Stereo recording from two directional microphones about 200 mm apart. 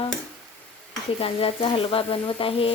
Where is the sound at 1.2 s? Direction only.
30° left (ahead or behind).